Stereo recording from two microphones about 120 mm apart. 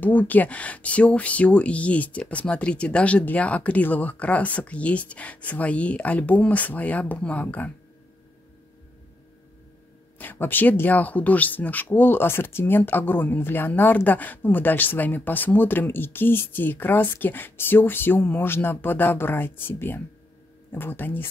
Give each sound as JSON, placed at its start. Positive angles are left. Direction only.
{"t": 0.0, "sound": "speech", "side_deg": 15}
{"t": 10.1, "sound": "speech", "side_deg": 15}